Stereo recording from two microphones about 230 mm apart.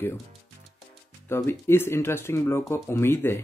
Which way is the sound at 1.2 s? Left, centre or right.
Centre.